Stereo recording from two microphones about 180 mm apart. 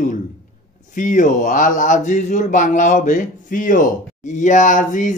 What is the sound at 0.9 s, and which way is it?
Speech, 45° left (ahead or behind).